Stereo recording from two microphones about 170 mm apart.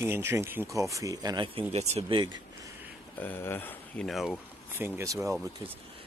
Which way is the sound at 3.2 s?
10° left (ahead or behind).